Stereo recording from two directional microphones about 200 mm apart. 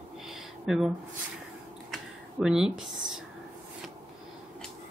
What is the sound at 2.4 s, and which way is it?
Speech, 5° right (ahead or behind).